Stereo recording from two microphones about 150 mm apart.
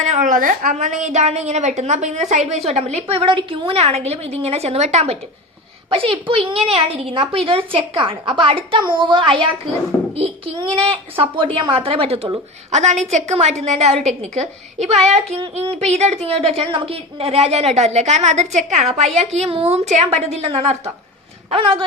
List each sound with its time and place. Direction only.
0.0 s a woman's voice: 55° right (ahead or behind)
5.9 s a woman's voice: 35° right (ahead or behind)